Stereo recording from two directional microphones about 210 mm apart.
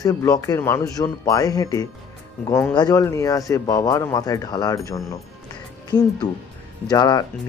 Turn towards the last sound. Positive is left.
turn(degrees=20)  # may be behind; listen again after turning